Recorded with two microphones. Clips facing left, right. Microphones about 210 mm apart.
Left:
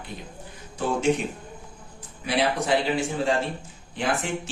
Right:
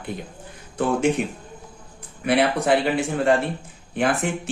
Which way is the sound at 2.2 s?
60° right (ahead or behind).